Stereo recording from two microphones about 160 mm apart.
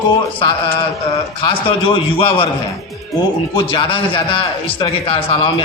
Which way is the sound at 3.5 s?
30° left (ahead or behind).